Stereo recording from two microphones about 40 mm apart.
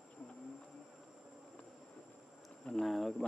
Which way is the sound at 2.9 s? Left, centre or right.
Centre.